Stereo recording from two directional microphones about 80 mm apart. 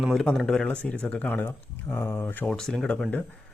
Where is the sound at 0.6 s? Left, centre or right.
Centre.